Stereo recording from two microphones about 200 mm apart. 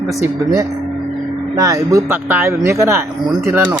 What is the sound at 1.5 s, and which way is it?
Speech, 15° right (ahead or behind).